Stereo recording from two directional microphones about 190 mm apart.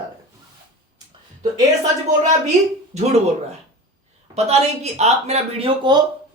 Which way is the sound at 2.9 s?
35° right (ahead or behind).